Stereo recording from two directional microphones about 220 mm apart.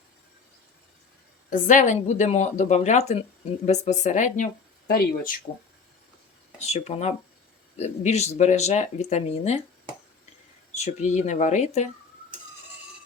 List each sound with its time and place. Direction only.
1.5 s speech: 35° left (ahead or behind)
6.6 s speech: 30° left (ahead or behind)
10.8 s speech: 30° left (ahead or behind)